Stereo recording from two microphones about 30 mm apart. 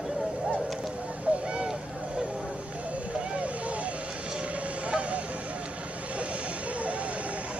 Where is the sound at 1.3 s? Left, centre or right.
Right.